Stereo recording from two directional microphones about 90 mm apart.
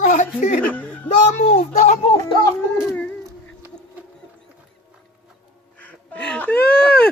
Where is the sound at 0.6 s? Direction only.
15° left (ahead or behind).